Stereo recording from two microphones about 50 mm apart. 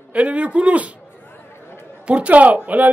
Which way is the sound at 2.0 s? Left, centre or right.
Right.